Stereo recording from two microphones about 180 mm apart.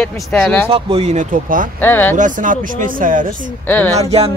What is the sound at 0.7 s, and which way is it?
Speech, 30° right (ahead or behind).